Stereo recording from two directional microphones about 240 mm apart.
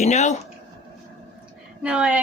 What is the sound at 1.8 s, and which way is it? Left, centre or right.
Speech, centre.